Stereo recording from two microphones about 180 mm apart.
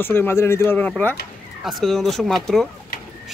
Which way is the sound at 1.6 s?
Centre (ahead or behind).